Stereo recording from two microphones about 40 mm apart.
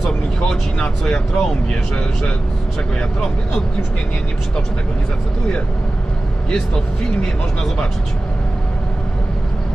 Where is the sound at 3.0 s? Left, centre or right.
Centre.